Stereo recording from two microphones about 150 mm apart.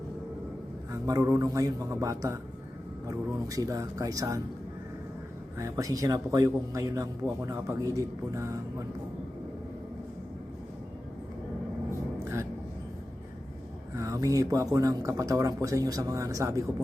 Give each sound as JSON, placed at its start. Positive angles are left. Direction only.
{"t": 0.9, "sound": "a man's voice", "side_deg": -20}
{"t": 5.5, "sound": "a man's voice", "side_deg": -20}
{"t": 12.2, "sound": "a sound", "side_deg": -20}
{"t": 13.9, "sound": "a man's voice", "side_deg": -20}